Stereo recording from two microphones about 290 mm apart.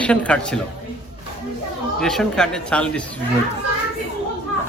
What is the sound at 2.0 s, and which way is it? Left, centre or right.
Speech, centre.